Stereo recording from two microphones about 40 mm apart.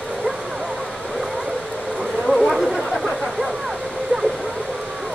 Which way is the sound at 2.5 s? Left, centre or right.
Centre.